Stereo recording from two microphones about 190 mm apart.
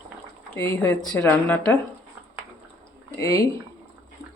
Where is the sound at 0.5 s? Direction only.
10° left (ahead or behind).